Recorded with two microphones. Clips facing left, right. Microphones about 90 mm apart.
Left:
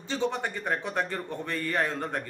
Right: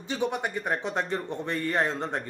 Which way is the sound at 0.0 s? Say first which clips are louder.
Right 1 dB; 15° right (ahead or behind).